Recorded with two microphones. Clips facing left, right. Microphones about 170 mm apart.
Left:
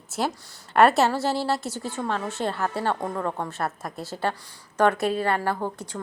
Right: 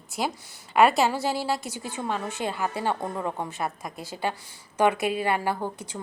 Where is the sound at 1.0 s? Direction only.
15° right (ahead or behind).